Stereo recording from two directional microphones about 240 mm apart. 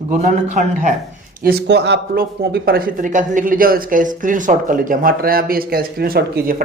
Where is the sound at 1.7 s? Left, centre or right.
Right.